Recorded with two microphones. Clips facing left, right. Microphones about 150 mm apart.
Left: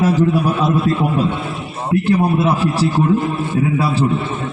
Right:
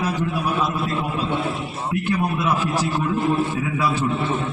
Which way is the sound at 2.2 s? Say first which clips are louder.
Left 6 dB; 30° left (ahead or behind).